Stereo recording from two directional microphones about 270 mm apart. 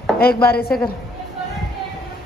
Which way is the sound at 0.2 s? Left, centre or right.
Left.